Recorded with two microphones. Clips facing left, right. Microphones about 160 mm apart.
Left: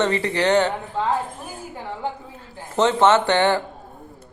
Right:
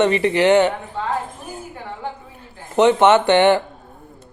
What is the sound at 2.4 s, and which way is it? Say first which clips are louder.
A man's voice: right 4 dB; 20° right (ahead or behind).